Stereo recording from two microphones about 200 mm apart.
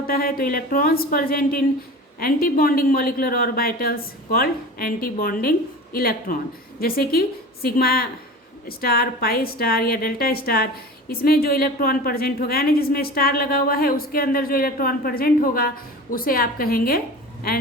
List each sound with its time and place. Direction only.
0.1 s a woman's voice: 45° left (ahead or behind)